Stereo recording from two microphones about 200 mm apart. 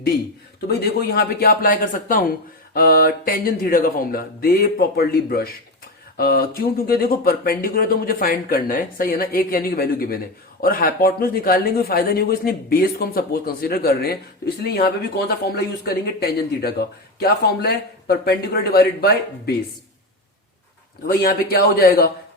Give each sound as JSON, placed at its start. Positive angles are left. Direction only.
{"t": 0.7, "sound": "speech", "side_deg": 55}
{"t": 21.1, "sound": "speech", "side_deg": 50}